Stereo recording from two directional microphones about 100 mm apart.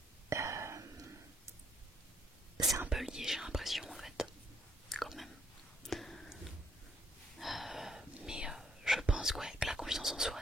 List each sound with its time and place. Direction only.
0.3 s whispering: 30° right (ahead or behind)
2.9 s whispering: 5° right (ahead or behind)
4.8 s chewing: centre (ahead or behind)
5.8 s a sound: 5° left (ahead or behind)
7.3 s whispering: centre (ahead or behind)